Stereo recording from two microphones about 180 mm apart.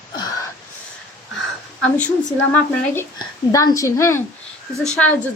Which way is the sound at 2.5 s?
10° left (ahead or behind).